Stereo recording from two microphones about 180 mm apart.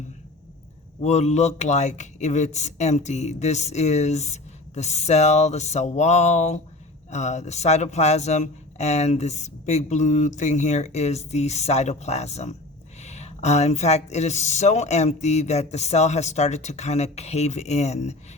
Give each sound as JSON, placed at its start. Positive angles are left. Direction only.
{"t": 1.0, "sound": "speech", "side_deg": 35}